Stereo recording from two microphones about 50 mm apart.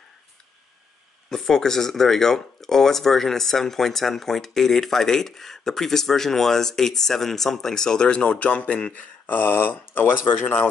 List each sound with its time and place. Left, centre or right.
1.3 s speech: centre; by 9.0 s left
9.2 s speech: left